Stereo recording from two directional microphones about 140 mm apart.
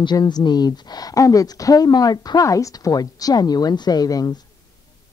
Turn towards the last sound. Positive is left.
turn(degrees=30)  # may be behind; listen again after turning